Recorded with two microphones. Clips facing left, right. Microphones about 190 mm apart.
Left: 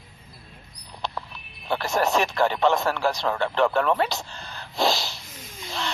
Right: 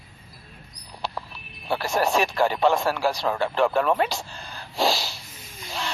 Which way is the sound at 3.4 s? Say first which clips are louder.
Even; 10° right (ahead or behind).